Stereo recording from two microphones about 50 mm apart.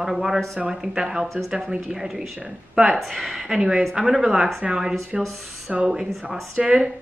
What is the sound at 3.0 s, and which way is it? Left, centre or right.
Speech, centre.